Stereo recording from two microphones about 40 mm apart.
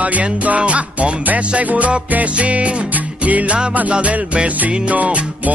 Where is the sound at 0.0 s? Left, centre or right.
Right.